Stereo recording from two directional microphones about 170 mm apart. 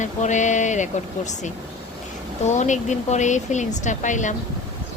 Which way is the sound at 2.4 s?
45° left (ahead or behind).